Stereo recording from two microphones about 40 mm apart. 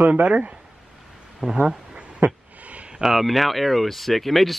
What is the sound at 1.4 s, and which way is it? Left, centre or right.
Speech, centre.